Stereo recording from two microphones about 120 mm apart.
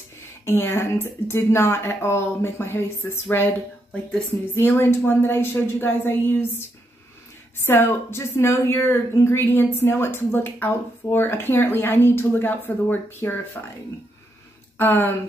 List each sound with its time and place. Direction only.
0.5 s a woman's voice: 20° left (ahead or behind)
4.6 s a woman's voice: 20° left (ahead or behind)
7.6 s a woman's voice: 20° left (ahead or behind)
14.8 s speech: 15° left (ahead or behind)